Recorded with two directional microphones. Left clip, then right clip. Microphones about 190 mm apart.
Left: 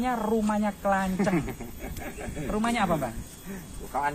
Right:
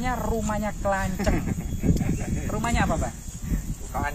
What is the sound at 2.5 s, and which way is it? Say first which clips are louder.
Speech: even; centre (ahead or behind).